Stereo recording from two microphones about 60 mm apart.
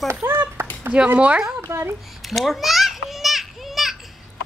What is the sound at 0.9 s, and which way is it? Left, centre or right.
Speech, right.